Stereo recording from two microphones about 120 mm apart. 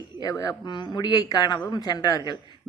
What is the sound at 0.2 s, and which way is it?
A man's voice, 30° left (ahead or behind).